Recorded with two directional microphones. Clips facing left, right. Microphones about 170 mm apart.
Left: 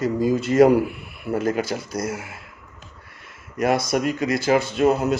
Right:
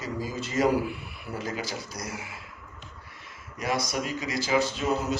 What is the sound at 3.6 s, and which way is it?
A man's voice, 55° left (ahead or behind).